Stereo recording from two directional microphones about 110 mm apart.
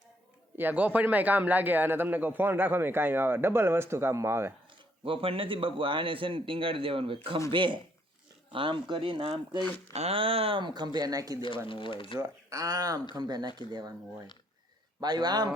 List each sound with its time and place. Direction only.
0.5 s a man's voice: 15° right (ahead or behind)
5.0 s a man's voice: 55° right (ahead or behind)
9.3 s speech: 35° right (ahead or behind)
9.9 s a man's voice: 65° right (ahead or behind); by 11.4 s 35° right (ahead or behind)
11.7 s speech: 50° left (ahead or behind)
12.5 s speech: 35° right (ahead or behind)
15.0 s speech: 40° right (ahead or behind)